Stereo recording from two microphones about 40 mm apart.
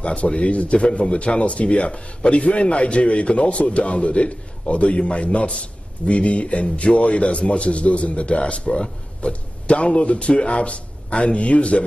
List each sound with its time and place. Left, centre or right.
0.0 s speech: left